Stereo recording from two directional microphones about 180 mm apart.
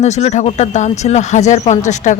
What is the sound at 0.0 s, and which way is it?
Speech, 40° left (ahead or behind).